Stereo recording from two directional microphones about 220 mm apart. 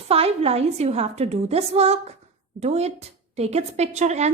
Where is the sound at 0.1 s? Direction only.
30° right (ahead or behind).